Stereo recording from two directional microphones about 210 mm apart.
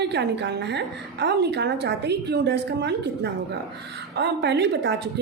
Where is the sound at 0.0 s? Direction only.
55° right (ahead or behind).